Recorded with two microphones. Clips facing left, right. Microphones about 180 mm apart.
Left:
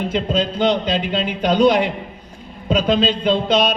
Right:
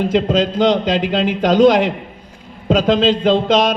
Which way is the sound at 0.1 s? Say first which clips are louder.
Right 5 dB; 90° right.